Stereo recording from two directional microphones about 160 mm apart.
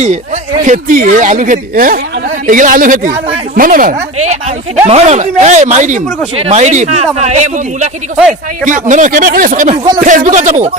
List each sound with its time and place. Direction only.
0.6 s speech: 55° right (ahead or behind)
4.9 s speech: 40° right (ahead or behind)
9.7 s speech: 25° right (ahead or behind)
10.0 s speech: 55° right (ahead or behind)